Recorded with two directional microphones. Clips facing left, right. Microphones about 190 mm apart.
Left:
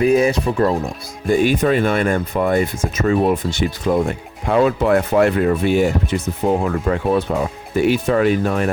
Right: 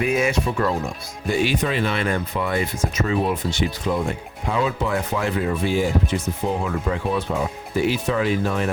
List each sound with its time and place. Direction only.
0.0 s speech: 35° left (ahead or behind)
1.3 s speech: 50° left (ahead or behind)
4.4 s speech: 60° left (ahead or behind)
6.5 s speech: 50° left (ahead or behind)